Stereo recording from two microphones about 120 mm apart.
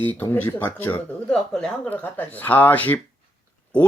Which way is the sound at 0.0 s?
15° left (ahead or behind).